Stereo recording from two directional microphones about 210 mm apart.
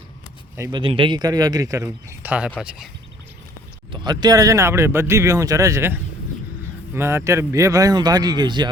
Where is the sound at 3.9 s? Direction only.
20° right (ahead or behind).